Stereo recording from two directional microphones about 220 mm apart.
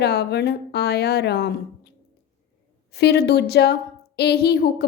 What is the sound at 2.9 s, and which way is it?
A woman's voice, 50° left (ahead or behind).